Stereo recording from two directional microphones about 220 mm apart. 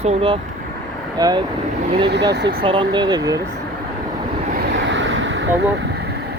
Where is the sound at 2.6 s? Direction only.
20° right (ahead or behind).